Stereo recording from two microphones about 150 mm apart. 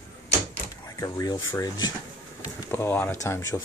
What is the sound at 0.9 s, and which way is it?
Speech, 25° left (ahead or behind).